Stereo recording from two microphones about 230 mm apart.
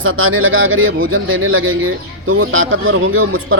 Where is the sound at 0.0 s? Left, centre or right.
Right.